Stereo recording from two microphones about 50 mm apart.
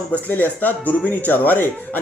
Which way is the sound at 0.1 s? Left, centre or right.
Left.